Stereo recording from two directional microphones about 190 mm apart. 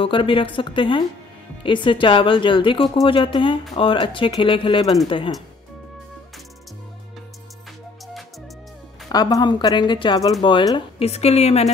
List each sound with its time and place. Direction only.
0.0 s speech: 25° left (ahead or behind)
9.1 s speech: 20° left (ahead or behind)
11.1 s a woman's voice: 35° left (ahead or behind)